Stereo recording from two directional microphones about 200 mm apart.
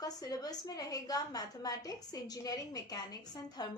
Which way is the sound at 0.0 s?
20° left (ahead or behind).